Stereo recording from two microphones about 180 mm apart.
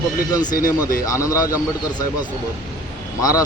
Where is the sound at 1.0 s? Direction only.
20° left (ahead or behind).